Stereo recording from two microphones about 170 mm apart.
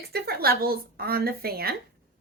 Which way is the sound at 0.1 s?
65° right (ahead or behind).